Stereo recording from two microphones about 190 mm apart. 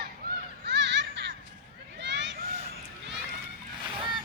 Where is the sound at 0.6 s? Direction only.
70° right (ahead or behind).